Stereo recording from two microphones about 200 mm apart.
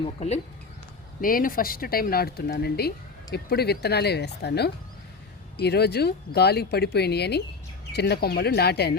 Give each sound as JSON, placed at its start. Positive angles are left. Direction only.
{"t": 0.0, "sound": "speech", "side_deg": 35}
{"t": 1.2, "sound": "speech", "side_deg": 45}